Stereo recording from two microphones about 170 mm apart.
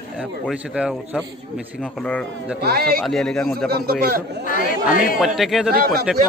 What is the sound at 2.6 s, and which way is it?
Speech, 65° right (ahead or behind).